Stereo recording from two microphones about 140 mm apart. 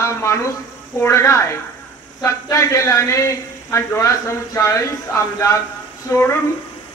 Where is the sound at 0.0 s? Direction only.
20° left (ahead or behind).